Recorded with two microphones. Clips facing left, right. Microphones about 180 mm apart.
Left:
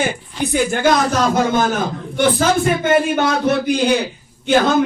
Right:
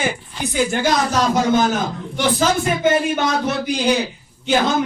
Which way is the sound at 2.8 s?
55° left (ahead or behind).